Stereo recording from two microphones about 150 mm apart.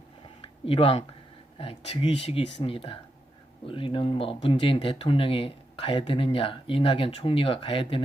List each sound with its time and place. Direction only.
0.4 s speech: 40° left (ahead or behind)